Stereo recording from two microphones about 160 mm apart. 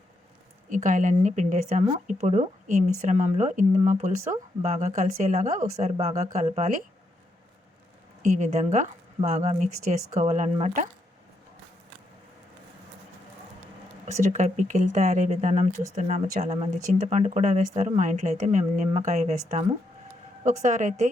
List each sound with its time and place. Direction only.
0.7 s speech: 55° right (ahead or behind)
8.2 s speech: 50° right (ahead or behind)
14.0 s speech: 50° right (ahead or behind)